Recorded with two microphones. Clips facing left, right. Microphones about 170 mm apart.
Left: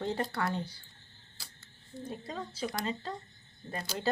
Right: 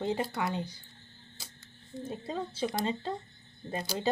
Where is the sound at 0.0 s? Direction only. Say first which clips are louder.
Right 1 dB; 10° right (ahead or behind).